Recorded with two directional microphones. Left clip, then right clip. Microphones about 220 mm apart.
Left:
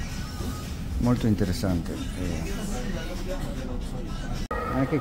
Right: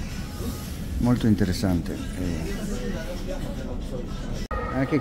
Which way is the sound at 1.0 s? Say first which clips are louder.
Right 2 dB; 5° right (ahead or behind).